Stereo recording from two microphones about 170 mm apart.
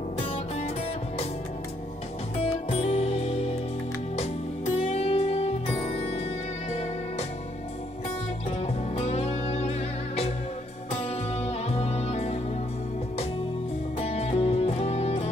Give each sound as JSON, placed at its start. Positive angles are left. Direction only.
{"t": 2.4, "sound": "music", "side_deg": 35}
{"t": 4.7, "sound": "music", "side_deg": 35}
{"t": 8.5, "sound": "music", "side_deg": 35}
{"t": 13.9, "sound": "music", "side_deg": 35}